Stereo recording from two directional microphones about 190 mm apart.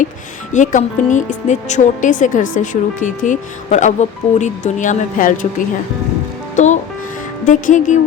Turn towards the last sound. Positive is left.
turn(degrees=40)  # may be behind; listen again after turning